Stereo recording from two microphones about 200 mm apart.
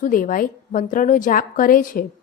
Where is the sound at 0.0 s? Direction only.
40° left (ahead or behind).